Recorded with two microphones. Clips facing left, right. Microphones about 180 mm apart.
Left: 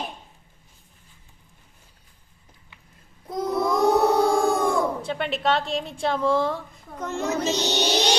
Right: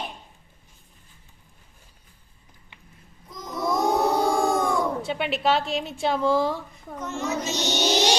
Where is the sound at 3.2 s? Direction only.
65° left (ahead or behind).